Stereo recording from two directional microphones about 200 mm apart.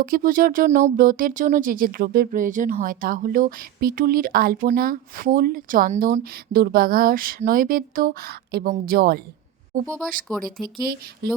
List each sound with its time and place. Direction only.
0.0 s speech: 45° right (ahead or behind)
9.8 s speech: 5° left (ahead or behind)
10.8 s speech: 50° right (ahead or behind)